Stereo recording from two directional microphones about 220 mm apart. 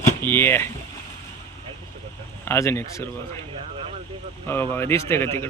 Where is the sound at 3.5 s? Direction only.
25° right (ahead or behind).